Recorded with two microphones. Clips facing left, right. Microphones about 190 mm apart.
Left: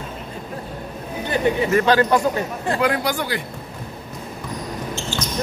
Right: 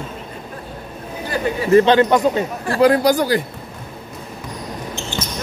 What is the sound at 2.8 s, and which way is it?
Speech, 40° right (ahead or behind).